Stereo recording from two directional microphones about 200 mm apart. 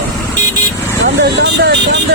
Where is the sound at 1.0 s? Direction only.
60° right (ahead or behind).